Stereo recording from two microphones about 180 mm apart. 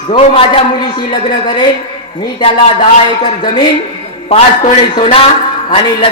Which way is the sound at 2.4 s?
30° left (ahead or behind).